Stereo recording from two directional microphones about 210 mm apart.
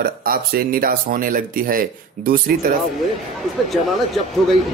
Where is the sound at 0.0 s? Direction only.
45° right (ahead or behind).